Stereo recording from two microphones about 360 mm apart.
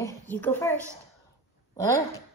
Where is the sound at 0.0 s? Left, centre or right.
Centre.